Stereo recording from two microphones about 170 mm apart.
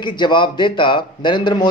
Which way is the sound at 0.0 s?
25° left (ahead or behind).